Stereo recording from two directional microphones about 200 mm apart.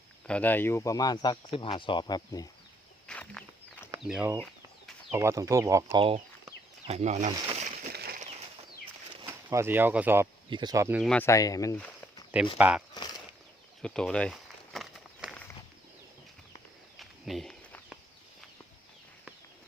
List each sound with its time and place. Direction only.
0.3 s speech: 5° left (ahead or behind)
3.1 s a sound: 5° left (ahead or behind)
4.0 s speech: 5° right (ahead or behind)
5.1 s speech: 15° right (ahead or behind); by 7.3 s 35° right (ahead or behind)
7.5 s a sound: 35° right (ahead or behind)
7.9 s a sound: 50° right (ahead or behind)
8.2 s bird flight: 30° right (ahead or behind)
9.5 s speech: 10° right (ahead or behind)
10.5 s speech: 20° right (ahead or behind)
11.0 s speech: 10° left (ahead or behind)
12.5 s speech: 10° right (ahead or behind)
13.8 s walk: 5° left (ahead or behind)
17.0 s a sound: centre (ahead or behind)